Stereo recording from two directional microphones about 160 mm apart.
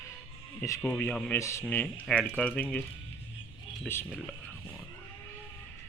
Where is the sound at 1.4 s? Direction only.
20° left (ahead or behind).